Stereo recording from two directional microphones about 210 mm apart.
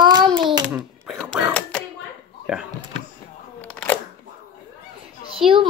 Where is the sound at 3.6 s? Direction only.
5° left (ahead or behind).